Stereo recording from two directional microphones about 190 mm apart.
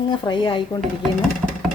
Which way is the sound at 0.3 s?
25° left (ahead or behind).